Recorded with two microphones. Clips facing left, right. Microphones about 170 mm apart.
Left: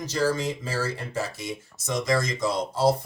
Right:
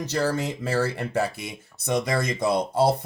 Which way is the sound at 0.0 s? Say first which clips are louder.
Even; 65° right (ahead or behind).